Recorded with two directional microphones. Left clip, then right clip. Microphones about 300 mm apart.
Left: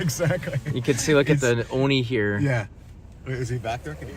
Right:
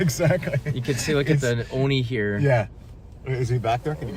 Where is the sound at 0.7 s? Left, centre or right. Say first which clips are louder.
Left 5 dB; centre.